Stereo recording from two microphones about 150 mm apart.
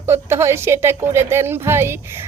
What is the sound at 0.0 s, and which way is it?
A woman's voice, 15° right (ahead or behind).